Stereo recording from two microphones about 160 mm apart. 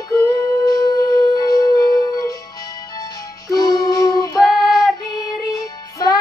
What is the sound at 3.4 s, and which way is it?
Music, 25° left (ahead or behind).